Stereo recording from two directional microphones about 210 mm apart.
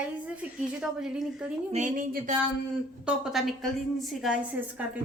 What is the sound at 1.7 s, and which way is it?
Speech, 35° right (ahead or behind).